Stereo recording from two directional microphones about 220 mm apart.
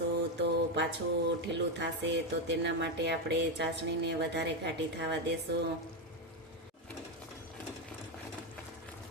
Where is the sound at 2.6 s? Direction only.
50° right (ahead or behind).